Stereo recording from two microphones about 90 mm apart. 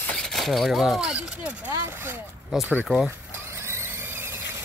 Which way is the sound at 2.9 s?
20° right (ahead or behind).